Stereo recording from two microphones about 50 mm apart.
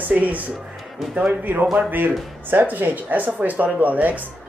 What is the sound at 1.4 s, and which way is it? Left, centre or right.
Speech, right.